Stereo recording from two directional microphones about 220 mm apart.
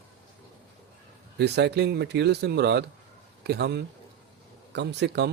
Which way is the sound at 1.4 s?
50° right (ahead or behind).